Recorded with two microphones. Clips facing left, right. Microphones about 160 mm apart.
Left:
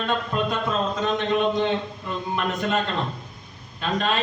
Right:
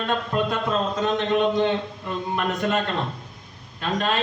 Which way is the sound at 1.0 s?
Centre (ahead or behind).